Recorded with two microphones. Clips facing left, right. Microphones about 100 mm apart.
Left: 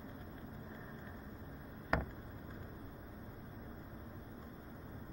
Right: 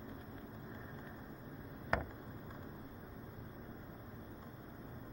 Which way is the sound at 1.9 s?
5° left (ahead or behind).